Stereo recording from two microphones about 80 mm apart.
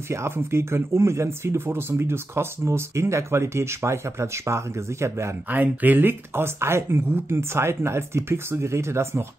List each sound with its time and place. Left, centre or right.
0.1 s speech: right
5.5 s speech: right